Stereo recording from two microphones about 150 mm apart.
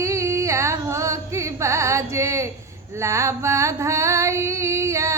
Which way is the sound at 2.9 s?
20° right (ahead or behind).